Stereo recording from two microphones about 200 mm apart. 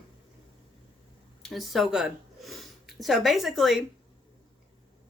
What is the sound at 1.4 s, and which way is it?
Speech, centre (ahead or behind).